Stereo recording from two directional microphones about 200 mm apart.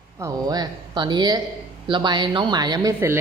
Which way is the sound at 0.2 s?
15° right (ahead or behind).